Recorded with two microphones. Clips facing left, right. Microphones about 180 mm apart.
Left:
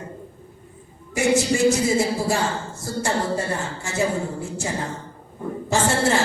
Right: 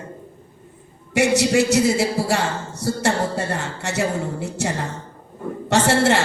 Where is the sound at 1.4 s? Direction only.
70° right (ahead or behind).